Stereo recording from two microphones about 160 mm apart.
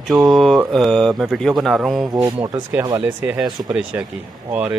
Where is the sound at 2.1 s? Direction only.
20° right (ahead or behind).